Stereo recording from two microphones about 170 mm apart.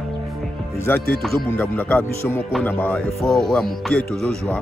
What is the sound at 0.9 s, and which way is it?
Speech, 10° left (ahead or behind).